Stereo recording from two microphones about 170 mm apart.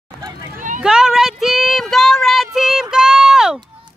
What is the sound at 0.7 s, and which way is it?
Child singing, 5° right (ahead or behind).